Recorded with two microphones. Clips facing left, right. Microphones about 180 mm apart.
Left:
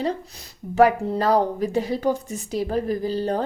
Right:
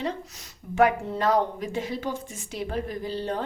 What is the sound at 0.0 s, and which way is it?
Speech, 35° left (ahead or behind).